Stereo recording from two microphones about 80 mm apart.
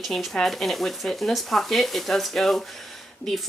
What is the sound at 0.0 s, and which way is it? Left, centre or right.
Speech, centre.